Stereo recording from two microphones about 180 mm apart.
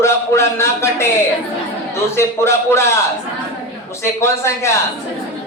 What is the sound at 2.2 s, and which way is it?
Speech, 15° left (ahead or behind).